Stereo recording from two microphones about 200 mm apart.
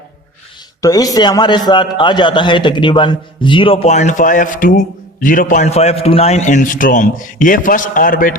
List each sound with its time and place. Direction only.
0.8 s a man's voice: 15° left (ahead or behind); by 8.4 s 40° left (ahead or behind)